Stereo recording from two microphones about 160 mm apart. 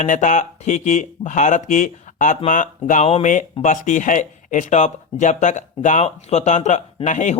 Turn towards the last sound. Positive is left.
turn(degrees=50)  # may be behind; listen again after turning